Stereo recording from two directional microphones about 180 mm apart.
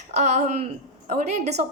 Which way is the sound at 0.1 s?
40° right (ahead or behind).